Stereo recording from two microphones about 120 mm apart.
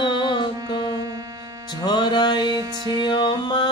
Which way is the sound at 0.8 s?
35° right (ahead or behind).